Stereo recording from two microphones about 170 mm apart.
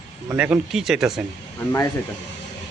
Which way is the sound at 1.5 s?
15° left (ahead or behind).